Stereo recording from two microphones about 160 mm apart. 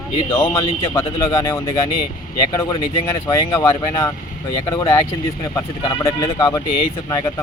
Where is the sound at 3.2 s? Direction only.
20° left (ahead or behind).